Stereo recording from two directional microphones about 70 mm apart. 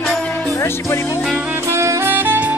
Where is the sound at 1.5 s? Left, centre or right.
Right.